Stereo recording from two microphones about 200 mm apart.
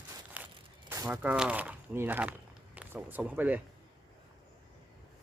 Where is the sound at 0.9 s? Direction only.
15° right (ahead or behind).